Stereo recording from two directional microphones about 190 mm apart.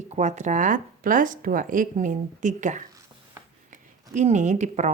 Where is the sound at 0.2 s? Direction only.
40° right (ahead or behind).